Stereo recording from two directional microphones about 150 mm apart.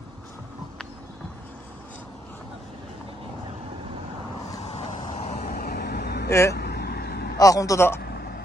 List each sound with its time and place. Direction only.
4.6 s vehicle: 45° left (ahead or behind); by 7.3 s 90° left
7.3 s a man's voice: 25° left (ahead or behind)
8.0 s vehicle: 90° left